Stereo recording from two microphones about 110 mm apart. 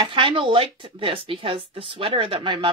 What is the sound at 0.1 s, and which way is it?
Speech, 50° right (ahead or behind).